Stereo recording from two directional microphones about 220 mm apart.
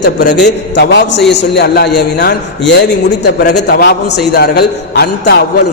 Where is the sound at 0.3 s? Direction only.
50° left (ahead or behind).